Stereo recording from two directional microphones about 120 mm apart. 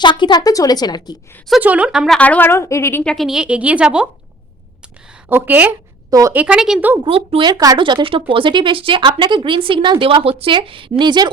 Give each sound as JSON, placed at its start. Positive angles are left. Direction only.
{"t": 0.0, "sound": "a woman's voice", "side_deg": 40}
{"t": 1.6, "sound": "a woman's voice", "side_deg": -10}
{"t": 2.1, "sound": "a woman's voice", "side_deg": 10}
{"t": 3.0, "sound": "a woman's voice", "side_deg": 5}
{"t": 5.3, "sound": "a woman's voice", "side_deg": -15}
{"t": 6.1, "sound": "a woman's voice", "side_deg": -30}
{"t": 6.3, "sound": "a woman's voice", "side_deg": -10}
{"t": 7.0, "sound": "speech", "side_deg": -50}
{"t": 7.5, "sound": "speech", "side_deg": -30}
{"t": 7.8, "sound": "speech", "side_deg": -40}